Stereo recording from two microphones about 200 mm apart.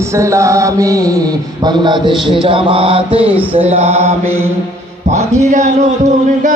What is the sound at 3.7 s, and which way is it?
Music, 30° right (ahead or behind).